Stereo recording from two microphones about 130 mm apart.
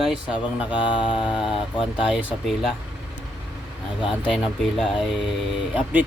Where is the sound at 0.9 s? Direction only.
40° left (ahead or behind).